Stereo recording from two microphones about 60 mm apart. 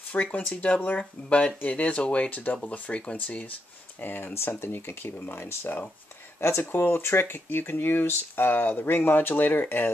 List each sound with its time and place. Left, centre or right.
0.1 s speech: left
4.0 s speech: left